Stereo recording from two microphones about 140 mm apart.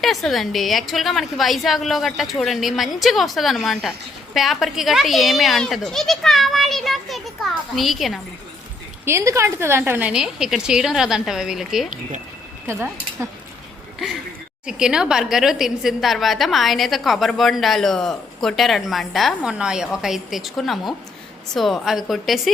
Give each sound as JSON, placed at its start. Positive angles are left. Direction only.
{"t": 0.0, "sound": "a woman's voice", "side_deg": 0}
{"t": 9.0, "sound": "a woman's voice", "side_deg": -20}
{"t": 12.6, "sound": "speech", "side_deg": -20}
{"t": 14.7, "sound": "a woman's voice", "side_deg": -5}